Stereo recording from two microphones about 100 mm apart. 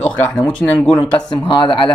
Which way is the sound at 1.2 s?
55° left (ahead or behind).